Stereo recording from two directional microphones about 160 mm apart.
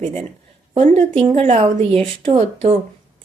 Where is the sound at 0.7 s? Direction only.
45° right (ahead or behind).